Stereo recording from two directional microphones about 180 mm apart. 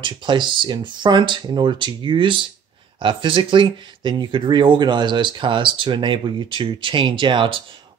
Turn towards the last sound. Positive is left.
turn(degrees=-30)  # may be behind; listen again after turning